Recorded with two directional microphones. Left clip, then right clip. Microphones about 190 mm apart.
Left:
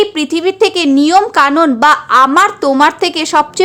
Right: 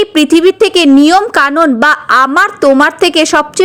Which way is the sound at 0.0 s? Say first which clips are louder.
Right 5 dB; 25° right (ahead or behind).